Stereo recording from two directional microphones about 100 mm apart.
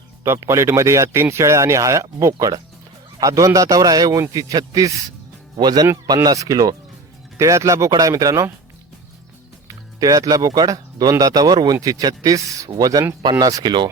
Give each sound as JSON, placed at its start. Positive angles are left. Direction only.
{"t": 0.3, "sound": "speech", "side_deg": -30}
{"t": 9.6, "sound": "speech", "side_deg": -35}